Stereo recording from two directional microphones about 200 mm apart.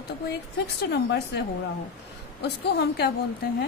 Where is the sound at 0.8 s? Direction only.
55° left (ahead or behind).